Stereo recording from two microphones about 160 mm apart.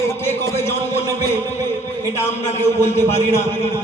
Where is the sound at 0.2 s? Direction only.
15° left (ahead or behind).